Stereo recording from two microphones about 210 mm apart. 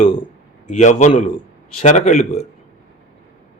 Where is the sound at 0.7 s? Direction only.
35° left (ahead or behind).